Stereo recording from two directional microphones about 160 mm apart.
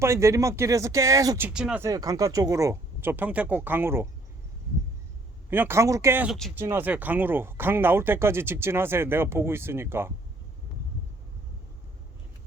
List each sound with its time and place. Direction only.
0.0 s speech: 15° right (ahead or behind)
1.5 s speech: 5° right (ahead or behind)
1.8 s speech: 20° right (ahead or behind)
5.5 s speech: 15° right (ahead or behind)
6.2 s speech: centre (ahead or behind)
6.6 s speech: 15° right (ahead or behind)